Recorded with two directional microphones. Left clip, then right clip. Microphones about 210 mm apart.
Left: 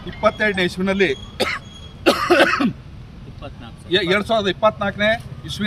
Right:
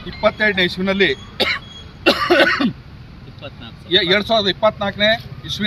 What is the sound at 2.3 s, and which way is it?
Cough, centre (ahead or behind).